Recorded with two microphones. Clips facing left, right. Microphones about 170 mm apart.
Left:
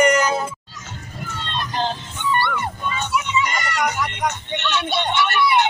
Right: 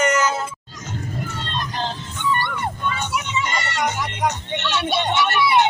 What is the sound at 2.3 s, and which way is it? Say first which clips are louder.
Music: left 4 dB; 45° right (ahead or behind).